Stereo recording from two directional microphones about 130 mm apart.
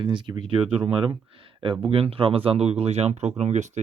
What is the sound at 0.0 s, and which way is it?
Speech, 35° right (ahead or behind).